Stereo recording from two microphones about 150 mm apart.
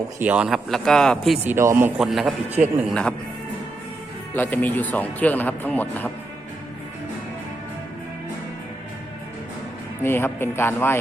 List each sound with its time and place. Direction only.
0.2 s speech: 10° right (ahead or behind)
1.5 s speech: 15° right (ahead or behind)
2.0 s a man's voice: centre (ahead or behind)
4.4 s a man's voice: 10° left (ahead or behind)
10.0 s a man's voice: 15° left (ahead or behind)